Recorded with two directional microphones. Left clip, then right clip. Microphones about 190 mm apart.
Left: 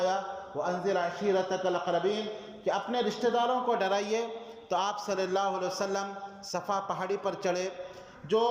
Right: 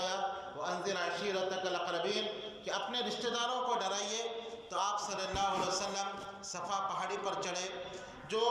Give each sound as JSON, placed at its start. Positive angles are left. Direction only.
{"t": 0.6, "sound": "a man's voice", "side_deg": 35}